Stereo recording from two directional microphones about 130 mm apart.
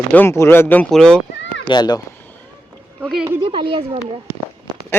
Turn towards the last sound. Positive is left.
turn(degrees=-40)  # may be behind; listen again after turning